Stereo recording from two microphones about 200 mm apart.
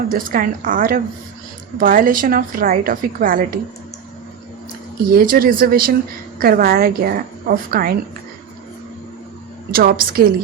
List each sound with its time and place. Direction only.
0.1 s a woman's voice: 45° right (ahead or behind)
5.1 s a woman's voice: 45° right (ahead or behind)
9.7 s a woman's voice: 45° right (ahead or behind)